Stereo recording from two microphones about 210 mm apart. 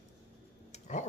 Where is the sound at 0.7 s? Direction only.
35° left (ahead or behind).